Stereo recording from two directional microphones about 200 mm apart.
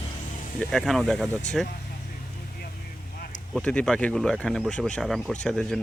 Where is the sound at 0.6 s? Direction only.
Centre (ahead or behind).